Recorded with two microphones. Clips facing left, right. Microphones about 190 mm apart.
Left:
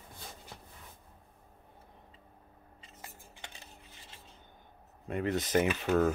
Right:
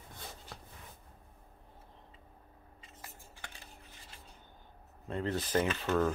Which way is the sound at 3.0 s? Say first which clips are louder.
Left 1 dB; 20° left (ahead or behind).